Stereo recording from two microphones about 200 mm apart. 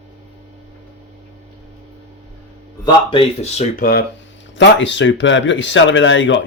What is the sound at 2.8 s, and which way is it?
Speech, 25° left (ahead or behind).